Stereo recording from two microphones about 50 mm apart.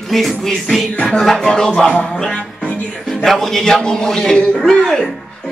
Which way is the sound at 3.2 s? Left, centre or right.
Centre.